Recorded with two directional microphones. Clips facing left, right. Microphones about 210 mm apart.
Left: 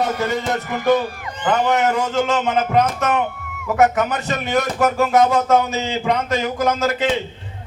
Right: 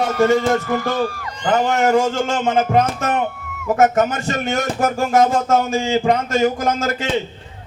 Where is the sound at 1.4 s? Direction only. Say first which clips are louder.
Right 1 dB; 45° right (ahead or behind).